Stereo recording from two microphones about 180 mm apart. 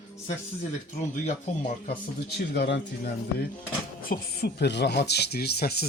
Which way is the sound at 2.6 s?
70° left (ahead or behind).